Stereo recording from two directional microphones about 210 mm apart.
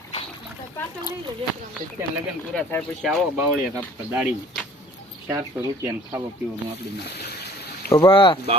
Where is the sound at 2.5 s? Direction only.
10° left (ahead or behind).